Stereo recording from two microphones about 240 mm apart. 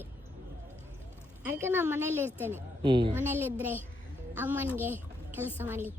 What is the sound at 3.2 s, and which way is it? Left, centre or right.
A woman's voice, centre.